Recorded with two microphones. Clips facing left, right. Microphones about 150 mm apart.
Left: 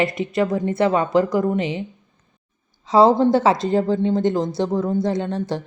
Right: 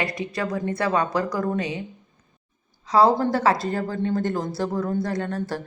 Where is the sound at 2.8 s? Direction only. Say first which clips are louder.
Left 4 dB; 25° left (ahead or behind).